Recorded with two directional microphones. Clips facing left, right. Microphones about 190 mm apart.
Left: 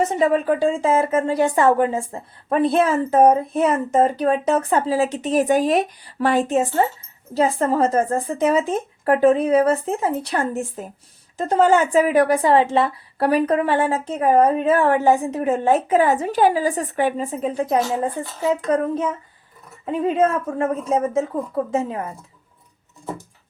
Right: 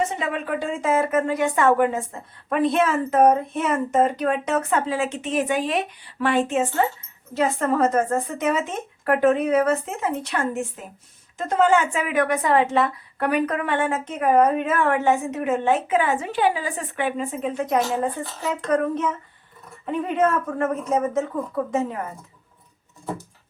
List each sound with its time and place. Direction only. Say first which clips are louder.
0.0 s speech: left 7 dB; 40° left (ahead or behind)